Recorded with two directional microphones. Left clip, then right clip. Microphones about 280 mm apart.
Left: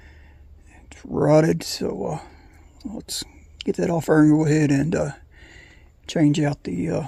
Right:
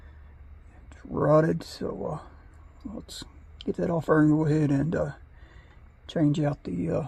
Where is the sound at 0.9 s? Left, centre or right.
Left.